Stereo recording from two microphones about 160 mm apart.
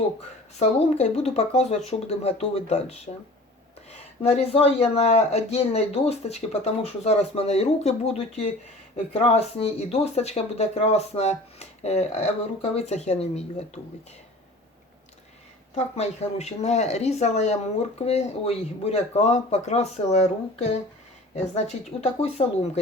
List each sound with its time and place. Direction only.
0.6 s speech: 45° left (ahead or behind)
15.7 s speech: 45° left (ahead or behind)